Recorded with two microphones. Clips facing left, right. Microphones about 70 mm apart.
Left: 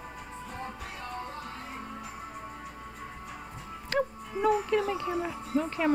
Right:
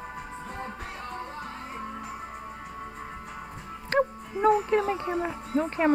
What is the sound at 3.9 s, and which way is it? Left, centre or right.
Music, right.